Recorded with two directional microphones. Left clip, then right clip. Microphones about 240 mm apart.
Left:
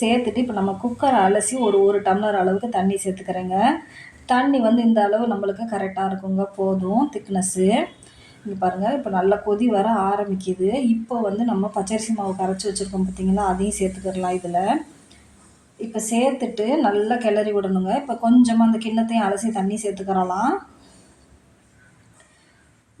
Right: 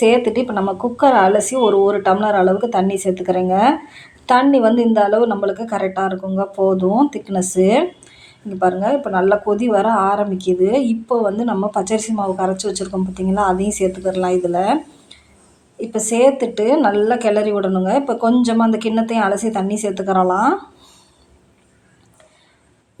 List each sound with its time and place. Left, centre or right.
0.0 s a woman's voice: centre
15.9 s a woman's voice: centre